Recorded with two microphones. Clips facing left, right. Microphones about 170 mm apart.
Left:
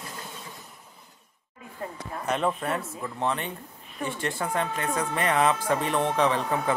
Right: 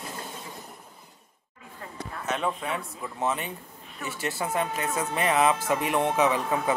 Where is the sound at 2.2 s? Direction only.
Centre (ahead or behind).